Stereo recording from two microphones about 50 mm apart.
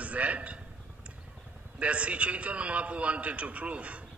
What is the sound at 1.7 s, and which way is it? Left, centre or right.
A man's voice, right.